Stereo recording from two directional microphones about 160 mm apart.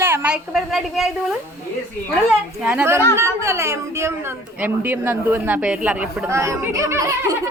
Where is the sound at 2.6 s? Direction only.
5° right (ahead or behind).